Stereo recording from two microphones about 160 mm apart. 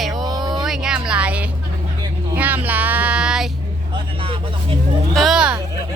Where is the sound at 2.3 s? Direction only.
10° right (ahead or behind).